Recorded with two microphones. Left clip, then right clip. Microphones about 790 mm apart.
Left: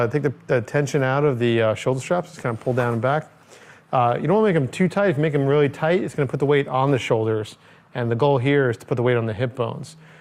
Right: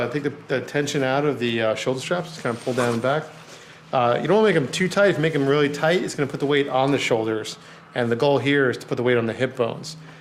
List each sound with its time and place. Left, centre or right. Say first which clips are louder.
0.0 s speech: left 3 dB; left